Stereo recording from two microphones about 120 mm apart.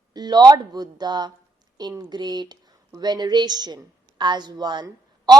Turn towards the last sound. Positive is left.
turn(degrees=-35)  # may be behind; listen again after turning